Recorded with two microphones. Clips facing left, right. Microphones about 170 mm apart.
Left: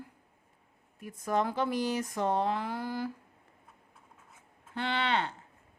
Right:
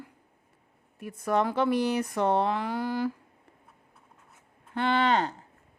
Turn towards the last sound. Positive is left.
turn(degrees=-40)  # may be behind; listen again after turning